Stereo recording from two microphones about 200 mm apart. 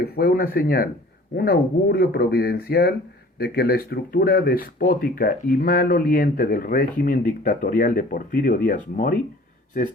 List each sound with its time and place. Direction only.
0.0 s speech: 50° left (ahead or behind)